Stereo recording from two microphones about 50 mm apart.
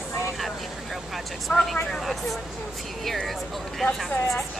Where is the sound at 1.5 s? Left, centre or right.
Centre.